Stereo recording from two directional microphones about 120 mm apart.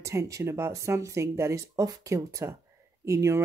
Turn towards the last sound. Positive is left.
turn(degrees=-25)  # may be behind; listen again after turning